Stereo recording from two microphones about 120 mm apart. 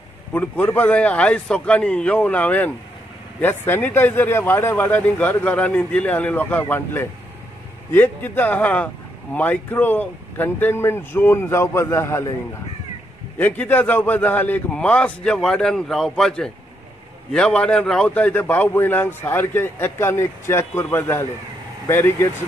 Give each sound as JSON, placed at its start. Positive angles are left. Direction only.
{"t": 0.3, "sound": "speech", "side_deg": 15}
{"t": 13.4, "sound": "speech", "side_deg": 15}